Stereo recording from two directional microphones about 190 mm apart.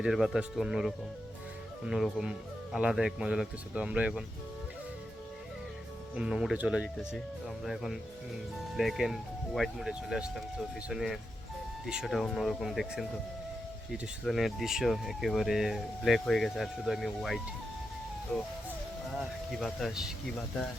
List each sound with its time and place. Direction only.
0.0 s speech: 5° right (ahead or behind)
6.1 s speech: 5° right (ahead or behind)
19.5 s speech: centre (ahead or behind)